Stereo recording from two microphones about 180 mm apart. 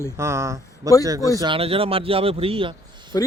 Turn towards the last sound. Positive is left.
turn(degrees=20)  # may be behind; listen again after turning